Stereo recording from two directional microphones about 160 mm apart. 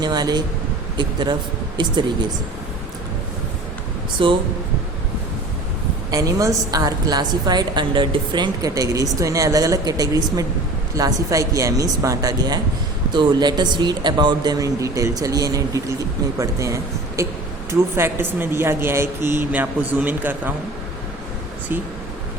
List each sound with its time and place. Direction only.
0.0 s a woman's voice: 25° right (ahead or behind)
4.2 s speech: 30° right (ahead or behind)
6.1 s a woman's voice: 20° right (ahead or behind)